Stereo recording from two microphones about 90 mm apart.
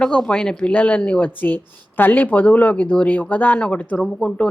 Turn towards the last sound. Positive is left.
turn(degrees=10)  # may be behind; listen again after turning